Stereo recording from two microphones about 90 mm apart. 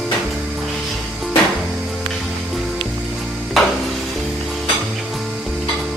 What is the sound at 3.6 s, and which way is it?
Stir, centre (ahead or behind).